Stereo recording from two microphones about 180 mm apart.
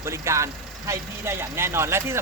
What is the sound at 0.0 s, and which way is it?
Speech, 15° right (ahead or behind).